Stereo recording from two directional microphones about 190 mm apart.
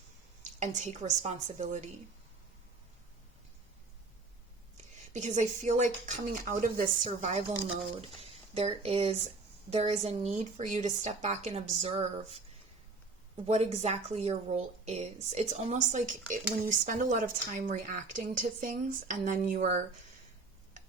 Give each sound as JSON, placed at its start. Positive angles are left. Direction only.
{"t": 0.6, "sound": "speech", "side_deg": -40}
{"t": 5.1, "sound": "speech", "side_deg": -40}
{"t": 13.5, "sound": "a woman's voice", "side_deg": -35}